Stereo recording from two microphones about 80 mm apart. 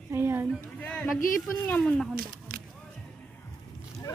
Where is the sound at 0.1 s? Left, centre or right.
Right.